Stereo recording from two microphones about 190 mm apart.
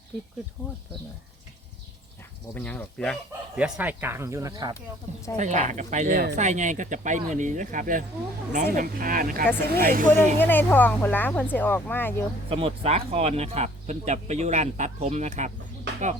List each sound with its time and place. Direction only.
2.6 s speech: 5° left (ahead or behind)
3.6 s speech: 10° right (ahead or behind)
5.4 s speech: 40° right (ahead or behind)
10.3 s speech: 10° left (ahead or behind)
12.5 s speech: 30° right (ahead or behind)